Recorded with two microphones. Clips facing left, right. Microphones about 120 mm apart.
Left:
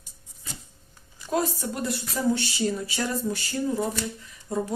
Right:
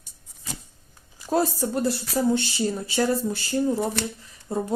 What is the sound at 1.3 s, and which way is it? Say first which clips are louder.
Speech: right 4 dB; 30° right (ahead or behind).